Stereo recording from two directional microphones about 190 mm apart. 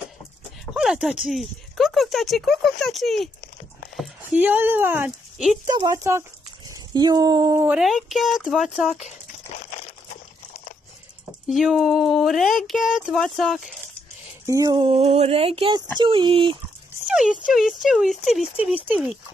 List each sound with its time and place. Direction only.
0.7 s speech: centre (ahead or behind)
5.7 s speech: 20° right (ahead or behind); by 8.6 s centre (ahead or behind)
11.4 s speech: centre (ahead or behind)
14.4 s speech: 15° right (ahead or behind)
17.1 s speech: 5° right (ahead or behind)